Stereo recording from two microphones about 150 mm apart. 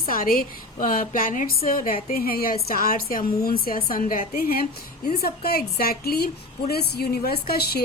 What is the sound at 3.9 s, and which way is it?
A woman's voice, 70° left (ahead or behind).